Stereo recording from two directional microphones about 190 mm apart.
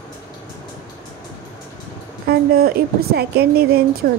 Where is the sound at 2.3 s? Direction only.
55° right (ahead or behind).